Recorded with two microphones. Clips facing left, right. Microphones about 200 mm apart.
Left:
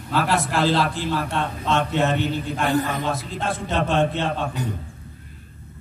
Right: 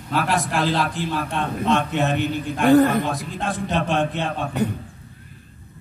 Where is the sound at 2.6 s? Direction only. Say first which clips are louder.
Right 9 dB; 60° right (ahead or behind).